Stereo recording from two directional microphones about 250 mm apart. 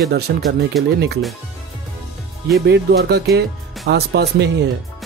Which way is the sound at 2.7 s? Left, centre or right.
Right.